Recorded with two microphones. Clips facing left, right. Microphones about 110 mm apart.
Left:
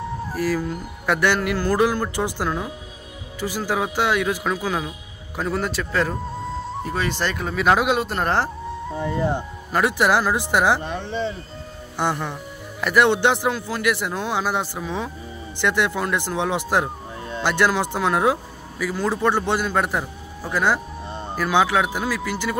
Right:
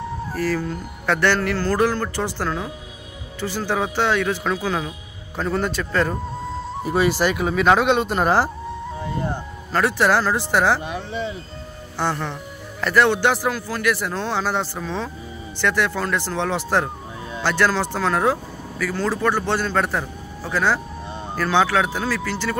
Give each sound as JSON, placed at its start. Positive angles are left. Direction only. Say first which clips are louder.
{"t": 0.3, "sound": "speech", "louder": "even", "side_deg": 10}
{"t": 6.9, "sound": "speech", "louder": "right 7 dB", "side_deg": -10}
{"t": 9.3, "sound": "speech", "louder": "left 1 dB", "side_deg": 15}
{"t": 10.8, "sound": "speech", "louder": "left 1 dB", "side_deg": -5}
{"t": 12.0, "sound": "speech", "louder": "even", "side_deg": 15}